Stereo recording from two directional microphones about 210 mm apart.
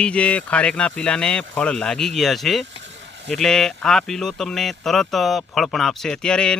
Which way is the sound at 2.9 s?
60° right (ahead or behind).